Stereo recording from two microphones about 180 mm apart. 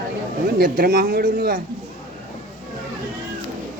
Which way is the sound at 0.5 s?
55° right (ahead or behind).